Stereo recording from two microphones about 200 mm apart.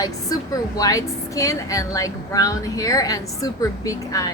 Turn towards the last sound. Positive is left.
turn(degrees=15)  # may be behind; listen again after turning